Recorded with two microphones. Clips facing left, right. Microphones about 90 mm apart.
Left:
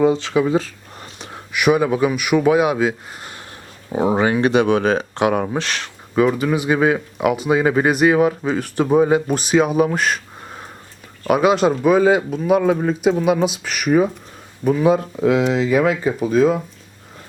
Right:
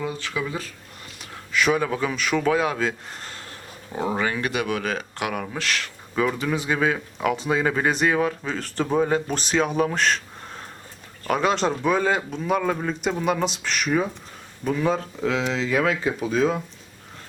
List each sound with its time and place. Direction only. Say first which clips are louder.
0.0 s speech: left 12 dB; 20° left (ahead or behind)
3.9 s speech: left 8 dB; 20° left (ahead or behind)
6.3 s speech: left 6 dB; 5° left (ahead or behind)